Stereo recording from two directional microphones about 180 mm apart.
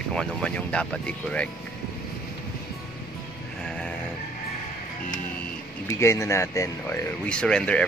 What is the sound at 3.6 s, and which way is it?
Sheep, 5° left (ahead or behind).